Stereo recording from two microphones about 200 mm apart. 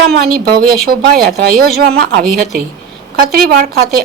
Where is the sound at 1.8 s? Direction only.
55° right (ahead or behind).